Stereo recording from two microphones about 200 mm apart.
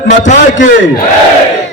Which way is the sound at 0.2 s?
40° left (ahead or behind).